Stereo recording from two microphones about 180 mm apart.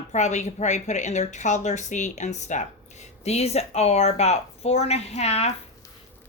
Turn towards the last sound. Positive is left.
turn(degrees=35)  # may be behind; listen again after turning